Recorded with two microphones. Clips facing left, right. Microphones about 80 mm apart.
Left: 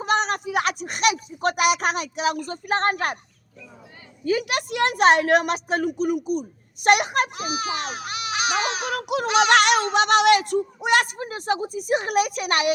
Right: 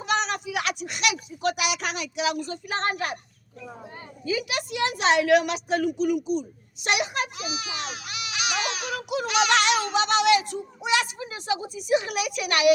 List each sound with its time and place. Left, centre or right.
0.0 s speech: left
4.2 s a woman's voice: left
9.0 s music: left
9.2 s speech: left
9.5 s music: left
9.9 s a woman's voice: left